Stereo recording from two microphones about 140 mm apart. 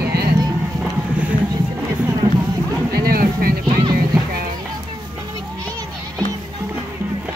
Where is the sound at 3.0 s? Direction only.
90° right.